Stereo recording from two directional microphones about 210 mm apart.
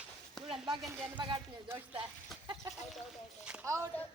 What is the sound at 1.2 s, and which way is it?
Speech, 20° right (ahead or behind).